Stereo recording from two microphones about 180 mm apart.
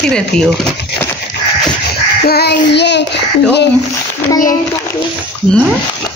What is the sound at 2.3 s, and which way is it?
Child singing, 60° left (ahead or behind).